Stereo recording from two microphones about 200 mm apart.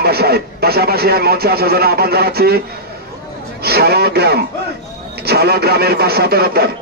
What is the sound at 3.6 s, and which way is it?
Speech, 50° right (ahead or behind).